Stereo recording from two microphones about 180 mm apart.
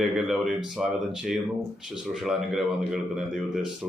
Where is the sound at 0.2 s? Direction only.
Centre (ahead or behind).